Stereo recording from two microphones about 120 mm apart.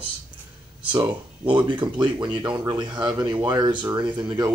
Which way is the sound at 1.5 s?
40° right (ahead or behind).